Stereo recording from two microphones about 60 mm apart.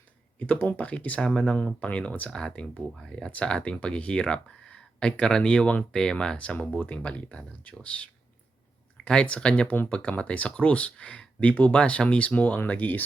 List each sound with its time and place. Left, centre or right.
0.3 s speech: left